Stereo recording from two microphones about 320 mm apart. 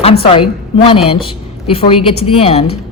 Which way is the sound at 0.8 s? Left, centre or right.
Centre.